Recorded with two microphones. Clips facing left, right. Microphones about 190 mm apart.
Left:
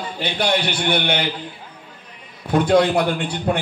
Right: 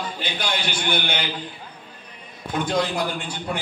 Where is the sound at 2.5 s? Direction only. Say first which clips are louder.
Left 8 dB; 60° left (ahead or behind).